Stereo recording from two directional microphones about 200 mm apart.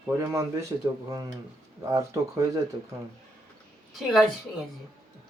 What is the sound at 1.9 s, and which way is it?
Speech, 15° right (ahead or behind).